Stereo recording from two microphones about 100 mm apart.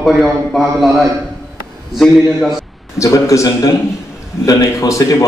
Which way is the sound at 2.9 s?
30° left (ahead or behind).